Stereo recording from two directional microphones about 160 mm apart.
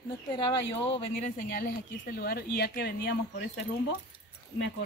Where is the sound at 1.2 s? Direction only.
60° left (ahead or behind); by 3.6 s 90° left.